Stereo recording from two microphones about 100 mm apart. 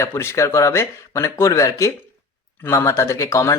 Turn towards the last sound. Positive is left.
turn(degrees=30)  # may be behind; listen again after turning